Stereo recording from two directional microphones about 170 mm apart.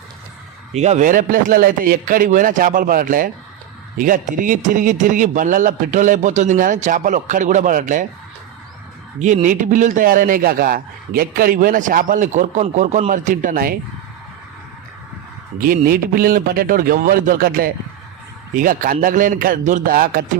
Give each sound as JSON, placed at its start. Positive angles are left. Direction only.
{"t": 0.7, "sound": "a man's voice", "side_deg": -40}
{"t": 9.1, "sound": "a man's voice", "side_deg": -45}
{"t": 15.5, "sound": "a man's voice", "side_deg": -55}